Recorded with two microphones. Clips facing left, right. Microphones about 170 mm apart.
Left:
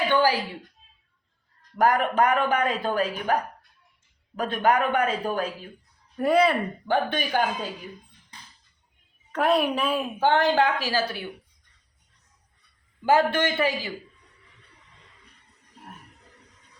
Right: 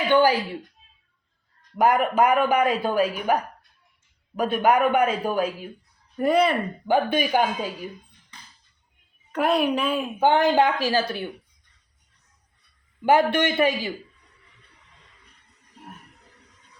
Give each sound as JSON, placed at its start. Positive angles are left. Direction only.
{"t": 0.1, "sound": "speech", "side_deg": -20}
{"t": 1.8, "sound": "speech", "side_deg": -5}
{"t": 4.4, "sound": "speech", "side_deg": -10}
{"t": 6.1, "sound": "a woman's voice", "side_deg": 0}
{"t": 6.8, "sound": "speech", "side_deg": -10}
{"t": 9.3, "sound": "a woman's voice", "side_deg": 0}
{"t": 10.2, "sound": "speech", "side_deg": -15}
{"t": 13.1, "sound": "speech", "side_deg": -15}